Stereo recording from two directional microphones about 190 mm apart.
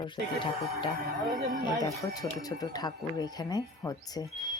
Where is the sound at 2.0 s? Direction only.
20° left (ahead or behind).